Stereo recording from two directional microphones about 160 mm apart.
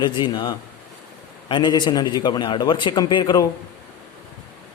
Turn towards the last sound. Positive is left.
turn(degrees=25)  # may be behind; listen again after turning